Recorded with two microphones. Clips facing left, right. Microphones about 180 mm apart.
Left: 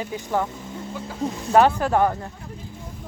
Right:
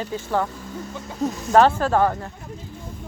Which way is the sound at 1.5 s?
15° left (ahead or behind).